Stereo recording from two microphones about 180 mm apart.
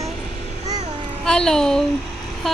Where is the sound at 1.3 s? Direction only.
5° left (ahead or behind).